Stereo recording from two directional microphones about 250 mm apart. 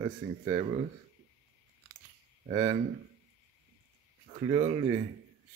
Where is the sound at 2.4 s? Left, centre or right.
Centre.